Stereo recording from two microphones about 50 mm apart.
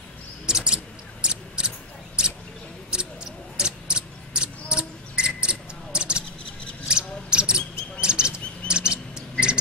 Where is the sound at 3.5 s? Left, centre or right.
Centre.